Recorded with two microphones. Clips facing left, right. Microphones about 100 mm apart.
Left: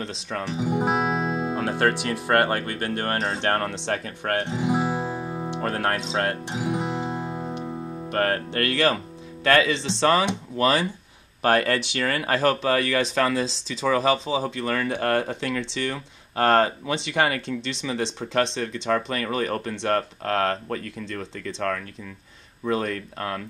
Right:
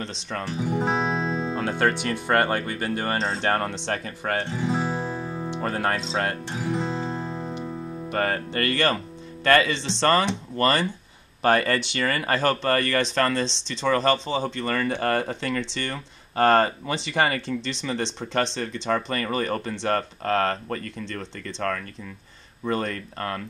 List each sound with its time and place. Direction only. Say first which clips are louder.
0.0 s speech: left 1 dB; centre (ahead or behind)
0.5 s speech: left 1 dB; 15° left (ahead or behind)
4.5 s music: left 2 dB; 15° left (ahead or behind)
5.5 s speech: even; centre (ahead or behind)
6.4 s music: left 1 dB; 15° left (ahead or behind)
8.1 s speech: left 2 dB; centre (ahead or behind)